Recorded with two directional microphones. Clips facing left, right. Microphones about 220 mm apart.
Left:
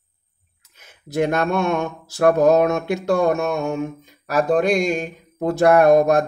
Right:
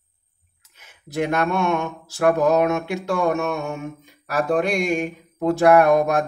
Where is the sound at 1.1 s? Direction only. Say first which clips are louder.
Left 2 dB; 40° left (ahead or behind).